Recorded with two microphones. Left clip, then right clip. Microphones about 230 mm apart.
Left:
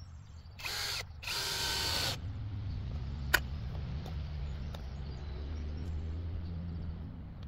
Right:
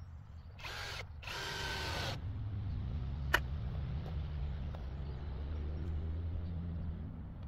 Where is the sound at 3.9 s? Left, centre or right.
Right.